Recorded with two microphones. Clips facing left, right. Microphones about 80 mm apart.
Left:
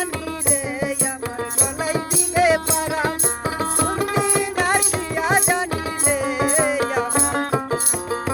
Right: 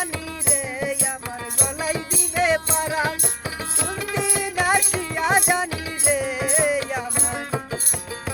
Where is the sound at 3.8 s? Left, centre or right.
Left.